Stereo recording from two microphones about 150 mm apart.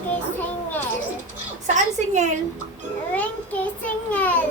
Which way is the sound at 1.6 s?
55° right (ahead or behind).